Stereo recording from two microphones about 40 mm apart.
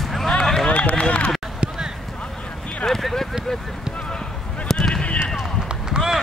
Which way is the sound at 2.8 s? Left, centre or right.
Centre.